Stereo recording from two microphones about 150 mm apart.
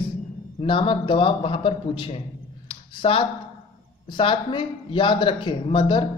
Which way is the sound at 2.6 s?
35° left (ahead or behind).